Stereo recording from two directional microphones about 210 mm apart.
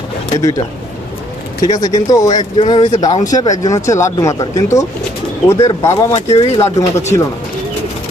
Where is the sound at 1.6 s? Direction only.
15° left (ahead or behind).